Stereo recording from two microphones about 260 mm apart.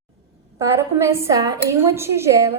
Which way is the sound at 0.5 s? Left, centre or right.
Centre.